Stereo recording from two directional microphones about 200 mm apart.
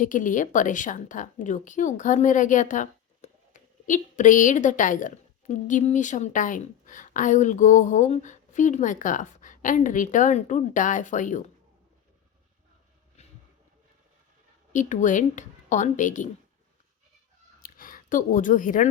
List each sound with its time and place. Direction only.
0.0 s a woman's voice: 40° left (ahead or behind)
14.7 s a woman's voice: 40° left (ahead or behind)
17.6 s a sound: 45° left (ahead or behind)